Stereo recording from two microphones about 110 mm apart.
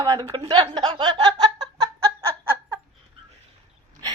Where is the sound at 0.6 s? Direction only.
55° right (ahead or behind).